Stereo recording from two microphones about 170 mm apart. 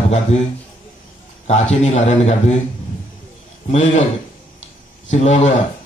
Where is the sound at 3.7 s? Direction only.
45° left (ahead or behind).